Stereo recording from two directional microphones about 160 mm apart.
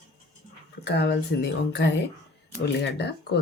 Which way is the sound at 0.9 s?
90° left.